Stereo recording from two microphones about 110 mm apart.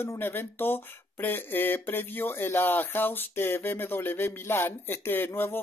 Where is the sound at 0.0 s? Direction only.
20° left (ahead or behind).